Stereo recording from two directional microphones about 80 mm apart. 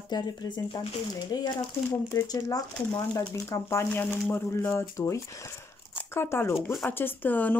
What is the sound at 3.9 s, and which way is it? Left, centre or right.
Speech, left.